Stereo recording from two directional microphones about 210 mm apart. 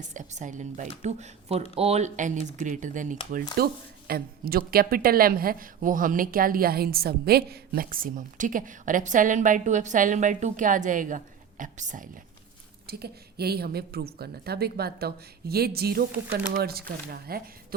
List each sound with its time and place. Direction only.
0.1 s speech: 35° right (ahead or behind)
12.9 s a woman's voice: 50° right (ahead or behind)